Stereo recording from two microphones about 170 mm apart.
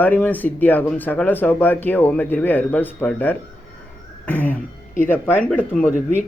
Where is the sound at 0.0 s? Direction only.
10° left (ahead or behind).